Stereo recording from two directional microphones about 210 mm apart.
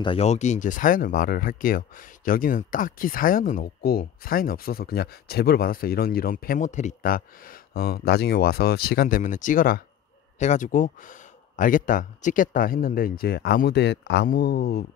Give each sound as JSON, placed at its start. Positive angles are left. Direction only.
{"t": 0.0, "sound": "speech", "side_deg": 25}